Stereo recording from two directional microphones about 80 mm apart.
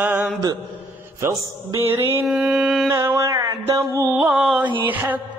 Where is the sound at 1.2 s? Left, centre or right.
Right.